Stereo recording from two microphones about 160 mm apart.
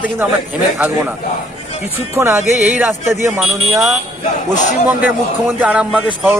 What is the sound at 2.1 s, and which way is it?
Speech, 15° right (ahead or behind).